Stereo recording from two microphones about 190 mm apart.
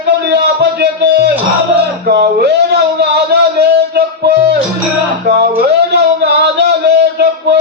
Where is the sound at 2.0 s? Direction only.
60° right (ahead or behind).